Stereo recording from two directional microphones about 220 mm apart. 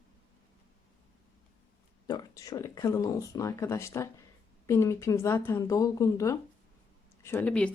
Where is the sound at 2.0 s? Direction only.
15° left (ahead or behind).